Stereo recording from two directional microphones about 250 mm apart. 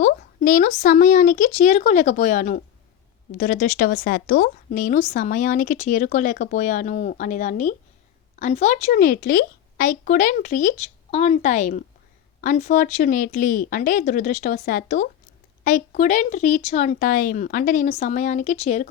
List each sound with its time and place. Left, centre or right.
0.0 s a woman's voice: left